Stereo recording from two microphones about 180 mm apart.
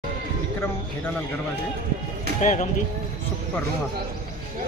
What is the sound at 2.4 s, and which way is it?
Speech, 45° left (ahead or behind).